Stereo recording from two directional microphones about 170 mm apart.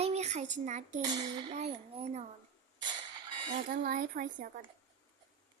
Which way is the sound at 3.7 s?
50° right (ahead or behind).